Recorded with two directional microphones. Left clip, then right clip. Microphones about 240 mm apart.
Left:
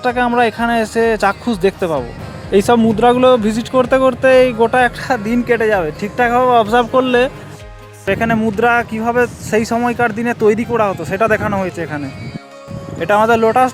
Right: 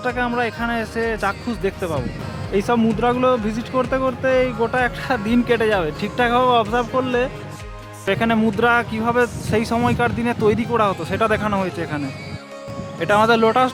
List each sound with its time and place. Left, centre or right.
0.0 s speech: left
6.7 s speech: left
8.0 s speech: centre